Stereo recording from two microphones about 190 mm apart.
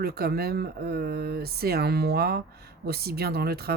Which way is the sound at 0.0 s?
55° right (ahead or behind).